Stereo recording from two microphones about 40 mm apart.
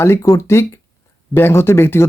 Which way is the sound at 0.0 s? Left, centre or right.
Left.